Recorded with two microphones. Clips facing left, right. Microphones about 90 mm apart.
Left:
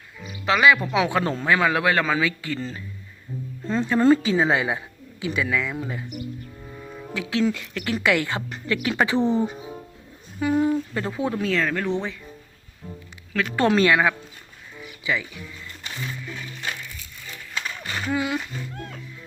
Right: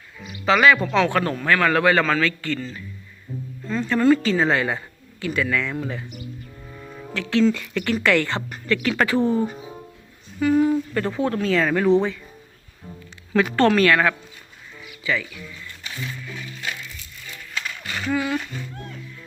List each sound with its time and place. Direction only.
0.2 s speech: 5° left (ahead or behind)
1.0 s speech: 20° left (ahead or behind)
2.6 s speech: 30° left (ahead or behind)
4.2 s speech: 10° left (ahead or behind)
9.0 s speech: 25° left (ahead or behind)
10.9 s speech: 10° left (ahead or behind)
11.5 s speech: 5° right (ahead or behind)
13.3 s speech: 30° right (ahead or behind)
13.7 s speech: 15° left (ahead or behind)
14.8 s music: 15° left (ahead or behind)
17.5 s a sound: 25° left (ahead or behind)
18.0 s speech: 15° left (ahead or behind)